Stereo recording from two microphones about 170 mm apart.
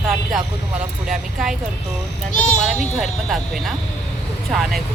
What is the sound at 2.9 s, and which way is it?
Speech, centre (ahead or behind).